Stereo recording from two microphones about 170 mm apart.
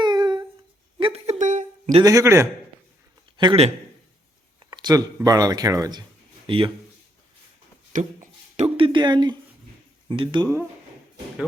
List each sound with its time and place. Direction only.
0.0 s humming: 25° right (ahead or behind)
0.9 s a sound: 35° right (ahead or behind)
2.0 s speech: 20° right (ahead or behind)
3.3 s a man's voice: 30° right (ahead or behind)
7.9 s speech: 45° right (ahead or behind); by 10.5 s 25° right (ahead or behind)